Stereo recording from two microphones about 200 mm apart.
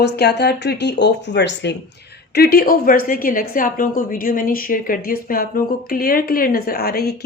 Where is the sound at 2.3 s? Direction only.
50° left (ahead or behind).